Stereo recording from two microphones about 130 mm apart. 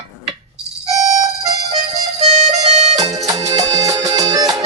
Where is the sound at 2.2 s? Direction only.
55° right (ahead or behind).